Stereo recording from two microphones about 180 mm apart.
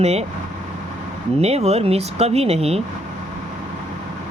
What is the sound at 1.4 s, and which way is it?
Speech, 35° right (ahead or behind).